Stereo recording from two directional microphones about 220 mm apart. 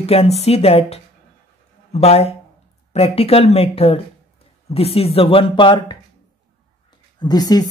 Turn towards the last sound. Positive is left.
turn(degrees=15)  # may be behind; listen again after turning